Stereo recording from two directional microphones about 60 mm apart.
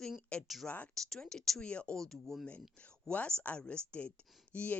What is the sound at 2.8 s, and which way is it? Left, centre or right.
A woman's voice, centre.